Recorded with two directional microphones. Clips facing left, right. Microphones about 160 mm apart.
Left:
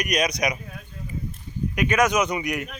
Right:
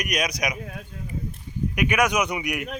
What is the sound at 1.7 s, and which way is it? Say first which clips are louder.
Speech: left 2 dB; 15° right (ahead or behind).